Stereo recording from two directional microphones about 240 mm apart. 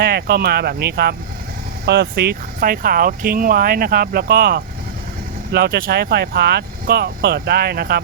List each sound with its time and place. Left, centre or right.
0.0 s speech: right